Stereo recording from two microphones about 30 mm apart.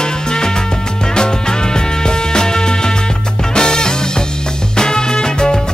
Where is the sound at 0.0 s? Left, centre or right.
Left.